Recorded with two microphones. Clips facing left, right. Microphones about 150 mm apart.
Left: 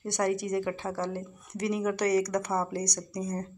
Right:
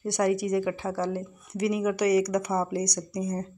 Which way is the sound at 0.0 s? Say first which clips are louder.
Right 3 dB; 10° right (ahead or behind).